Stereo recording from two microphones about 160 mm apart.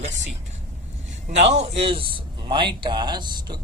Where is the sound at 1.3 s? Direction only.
45° right (ahead or behind); by 3.5 s 25° right (ahead or behind).